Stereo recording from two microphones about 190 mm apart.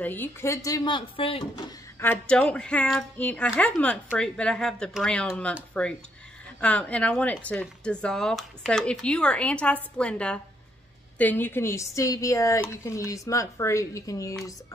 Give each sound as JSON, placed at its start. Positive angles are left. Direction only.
{"t": 0.0, "sound": "speech", "side_deg": 10}
{"t": 2.0, "sound": "a woman's voice", "side_deg": 10}